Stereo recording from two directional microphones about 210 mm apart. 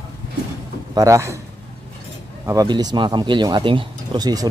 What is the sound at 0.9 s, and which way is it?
Speech, 15° right (ahead or behind).